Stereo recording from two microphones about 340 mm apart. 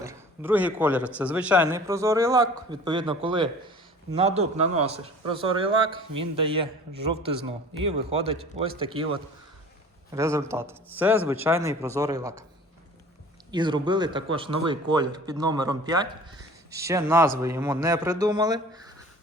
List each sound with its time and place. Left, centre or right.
0.0 s speech: centre
13.5 s speech: centre